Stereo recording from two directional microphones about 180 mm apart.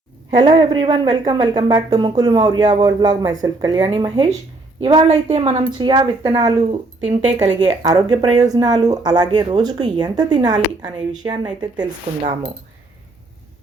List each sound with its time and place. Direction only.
0.3 s speech: 20° right (ahead or behind)
7.1 s speech: 40° right (ahead or behind)
7.9 s speech: 20° right (ahead or behind)